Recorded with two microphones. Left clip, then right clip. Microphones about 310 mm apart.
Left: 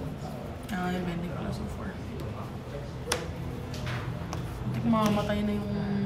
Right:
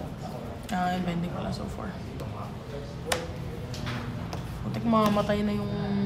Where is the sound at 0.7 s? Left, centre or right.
Right.